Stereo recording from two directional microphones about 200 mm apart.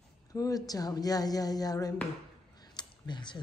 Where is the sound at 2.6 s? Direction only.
20° left (ahead or behind).